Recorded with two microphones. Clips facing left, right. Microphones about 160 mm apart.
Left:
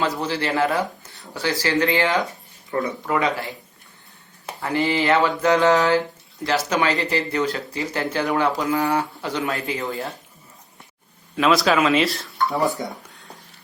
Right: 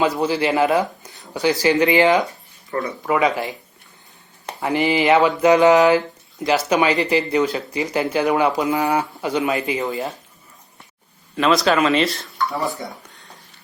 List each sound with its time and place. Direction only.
0.0 s speech: 15° right (ahead or behind)
2.7 s speech: 15° left (ahead or behind)
3.1 s speech: 15° right (ahead or behind)
4.6 s speech: 15° right (ahead or behind)
11.3 s speech: centre (ahead or behind)